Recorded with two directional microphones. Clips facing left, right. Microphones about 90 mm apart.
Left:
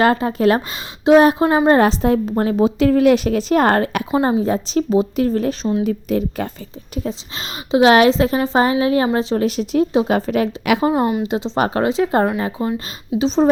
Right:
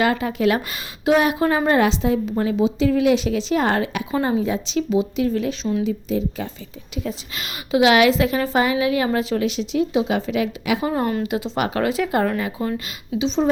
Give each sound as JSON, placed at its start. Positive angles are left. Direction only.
{"t": 0.0, "sound": "a woman's voice", "side_deg": 35}
{"t": 4.2, "sound": "speech", "side_deg": 35}
{"t": 5.8, "sound": "a woman's voice", "side_deg": 60}
{"t": 7.0, "sound": "speech", "side_deg": 30}
{"t": 10.9, "sound": "speech", "side_deg": 20}
{"t": 13.1, "sound": "speech", "side_deg": 40}